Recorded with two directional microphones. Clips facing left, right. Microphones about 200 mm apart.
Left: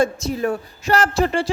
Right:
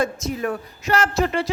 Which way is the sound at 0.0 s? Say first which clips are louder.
Left 3 dB; 30° left (ahead or behind).